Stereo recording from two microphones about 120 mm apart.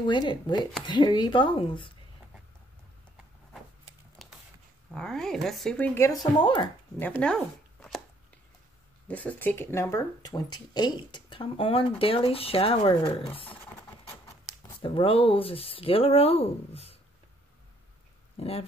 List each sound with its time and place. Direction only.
0.0 s speech: 40° left (ahead or behind)
4.2 s a sound: centre (ahead or behind)
4.9 s speech: 5° left (ahead or behind)
6.3 s speech: 40° left (ahead or behind)
7.0 s speech: 10° left (ahead or behind)
9.0 s speech: 10° left (ahead or behind); by 13.1 s 50° left (ahead or behind)
14.8 s speech: 45° left (ahead or behind)